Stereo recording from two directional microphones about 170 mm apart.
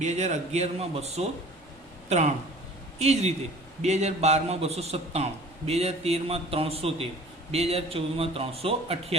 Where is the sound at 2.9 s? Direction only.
40° right (ahead or behind).